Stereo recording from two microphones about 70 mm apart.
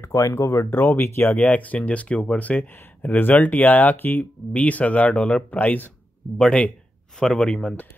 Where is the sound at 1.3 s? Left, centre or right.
Centre.